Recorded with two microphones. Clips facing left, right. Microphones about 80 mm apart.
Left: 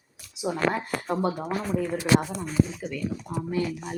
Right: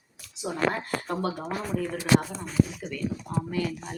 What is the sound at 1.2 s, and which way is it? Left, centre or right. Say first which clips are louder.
Speech: left 3 dB; centre.